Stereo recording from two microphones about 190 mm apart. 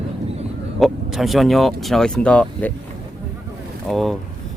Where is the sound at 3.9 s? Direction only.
Centre (ahead or behind).